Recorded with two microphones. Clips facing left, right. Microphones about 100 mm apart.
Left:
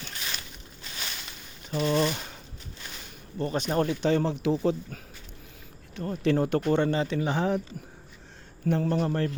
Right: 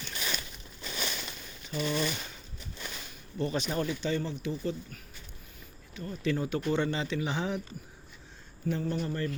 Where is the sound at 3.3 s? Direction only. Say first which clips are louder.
Left 4 dB; 45° left (ahead or behind); by 4.8 s 90° left.